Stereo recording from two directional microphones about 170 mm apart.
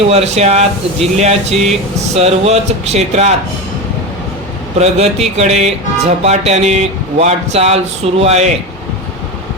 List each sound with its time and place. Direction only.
0.1 s speech: 40° right (ahead or behind)
4.8 s speech: 40° right (ahead or behind)